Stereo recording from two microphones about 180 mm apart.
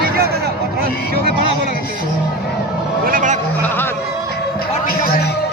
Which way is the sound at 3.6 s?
10° left (ahead or behind).